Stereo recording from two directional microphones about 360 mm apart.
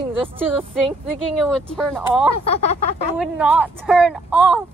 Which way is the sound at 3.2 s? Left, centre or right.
Centre.